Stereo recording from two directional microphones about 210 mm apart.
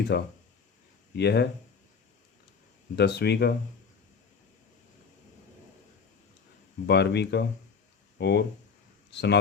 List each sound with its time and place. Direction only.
0.1 s speech: 50° left (ahead or behind)
2.9 s speech: 50° left (ahead or behind)
6.8 s speech: 55° left (ahead or behind)